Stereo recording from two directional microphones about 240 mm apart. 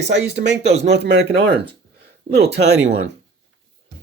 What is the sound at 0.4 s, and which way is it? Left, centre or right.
Speech, right.